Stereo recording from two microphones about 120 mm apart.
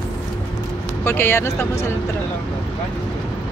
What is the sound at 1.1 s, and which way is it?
Speech, 20° left (ahead or behind).